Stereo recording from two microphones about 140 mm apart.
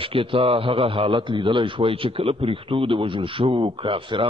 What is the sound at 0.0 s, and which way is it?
A man's voice, 40° right (ahead or behind).